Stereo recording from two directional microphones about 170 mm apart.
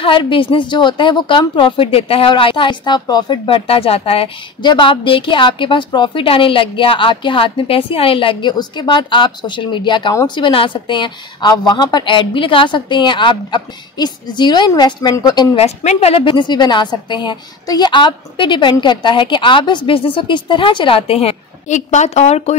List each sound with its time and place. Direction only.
0.0 s a woman's voice: 30° left (ahead or behind)
15.6 s a woman's voice: 40° left (ahead or behind)